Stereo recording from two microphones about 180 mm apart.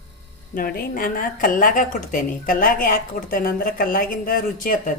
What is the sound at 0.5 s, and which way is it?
A woman's voice, 55° left (ahead or behind).